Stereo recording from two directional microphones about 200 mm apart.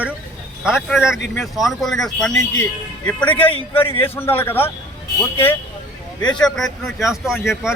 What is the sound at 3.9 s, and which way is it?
Speech, 10° left (ahead or behind).